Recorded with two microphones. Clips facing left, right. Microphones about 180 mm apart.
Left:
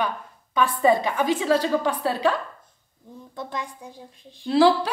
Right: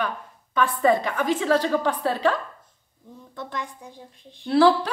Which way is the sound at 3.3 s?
10° left (ahead or behind).